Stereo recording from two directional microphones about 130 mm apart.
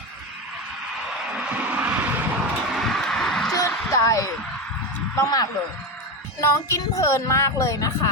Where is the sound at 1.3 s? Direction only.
10° right (ahead or behind).